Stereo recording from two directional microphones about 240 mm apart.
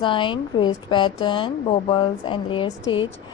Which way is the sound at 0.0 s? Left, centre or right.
Left.